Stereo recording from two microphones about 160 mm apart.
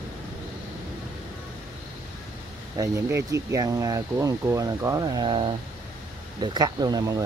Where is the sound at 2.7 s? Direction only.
20° right (ahead or behind).